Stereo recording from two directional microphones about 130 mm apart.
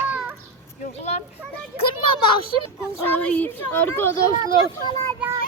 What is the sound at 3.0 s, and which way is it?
Speech, 15° left (ahead or behind).